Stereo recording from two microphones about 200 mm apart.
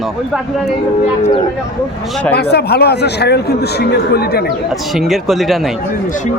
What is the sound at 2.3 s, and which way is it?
A man's voice, 55° left (ahead or behind).